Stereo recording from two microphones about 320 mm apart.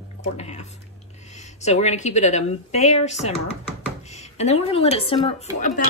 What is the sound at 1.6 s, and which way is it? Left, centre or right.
A woman's voice, left.